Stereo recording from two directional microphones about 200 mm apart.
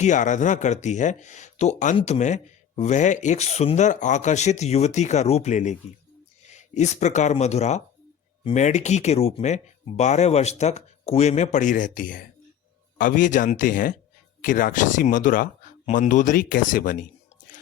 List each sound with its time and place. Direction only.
0.0 s speech: 35° left (ahead or behind)